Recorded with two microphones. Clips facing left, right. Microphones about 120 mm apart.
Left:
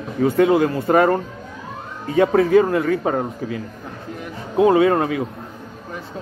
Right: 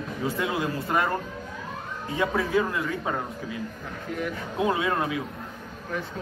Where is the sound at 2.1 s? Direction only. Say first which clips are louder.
Left 11 dB; 60° left (ahead or behind).